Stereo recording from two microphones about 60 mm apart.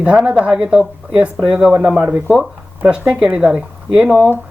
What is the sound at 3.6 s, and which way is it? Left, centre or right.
Speech, centre.